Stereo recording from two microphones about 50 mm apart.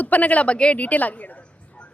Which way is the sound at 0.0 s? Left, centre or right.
Left.